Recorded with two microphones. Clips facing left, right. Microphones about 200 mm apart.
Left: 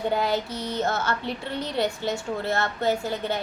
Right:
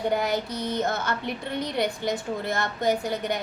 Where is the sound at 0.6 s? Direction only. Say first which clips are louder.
Even; 20° right (ahead or behind).